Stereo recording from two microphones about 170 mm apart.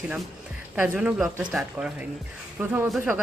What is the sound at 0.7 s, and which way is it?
Speech, 5° right (ahead or behind).